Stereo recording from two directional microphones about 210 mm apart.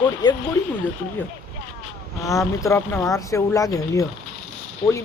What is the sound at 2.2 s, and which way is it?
Speech, 15° left (ahead or behind).